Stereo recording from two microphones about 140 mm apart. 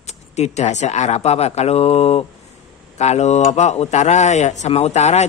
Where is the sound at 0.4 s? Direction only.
55° left (ahead or behind).